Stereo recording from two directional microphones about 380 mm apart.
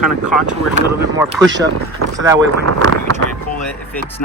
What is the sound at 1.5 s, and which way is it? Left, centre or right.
Speech, right.